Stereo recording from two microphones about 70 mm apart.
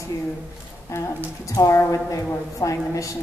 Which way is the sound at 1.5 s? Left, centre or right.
Left.